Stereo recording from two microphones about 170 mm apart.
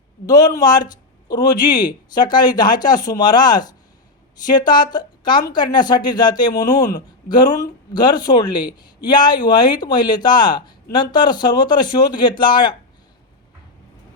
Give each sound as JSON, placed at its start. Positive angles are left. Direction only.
{"t": 0.3, "sound": "speech", "side_deg": 20}